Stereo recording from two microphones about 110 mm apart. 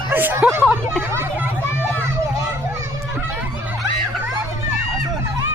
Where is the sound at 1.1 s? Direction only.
20° right (ahead or behind).